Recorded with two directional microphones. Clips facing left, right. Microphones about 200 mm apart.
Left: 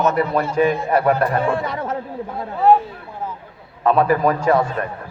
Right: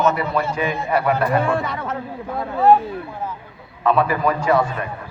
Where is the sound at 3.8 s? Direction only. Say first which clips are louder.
Left 2 dB; 40° left (ahead or behind).